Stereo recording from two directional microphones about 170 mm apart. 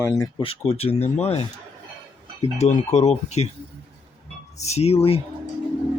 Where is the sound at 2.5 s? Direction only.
40° left (ahead or behind).